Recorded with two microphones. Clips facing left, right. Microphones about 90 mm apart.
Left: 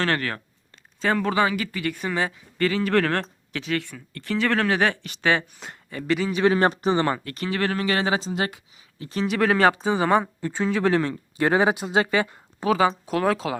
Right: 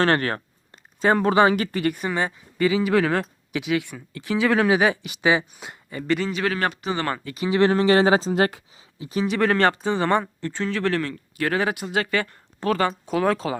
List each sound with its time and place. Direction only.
0.1 s speech: 35° right (ahead or behind)
2.0 s speech: 5° right (ahead or behind)
6.3 s a man's voice: 25° left (ahead or behind)
6.9 s speech: 15° left (ahead or behind)
7.3 s speech: 5° right (ahead or behind)
7.5 s speech: 25° right (ahead or behind); by 8.6 s 45° right (ahead or behind)
9.0 s speech: 5° right (ahead or behind)